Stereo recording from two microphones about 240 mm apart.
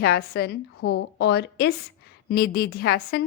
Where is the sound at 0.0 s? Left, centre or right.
Left.